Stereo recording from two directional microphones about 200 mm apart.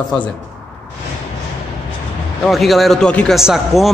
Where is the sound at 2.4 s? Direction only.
Centre (ahead or behind).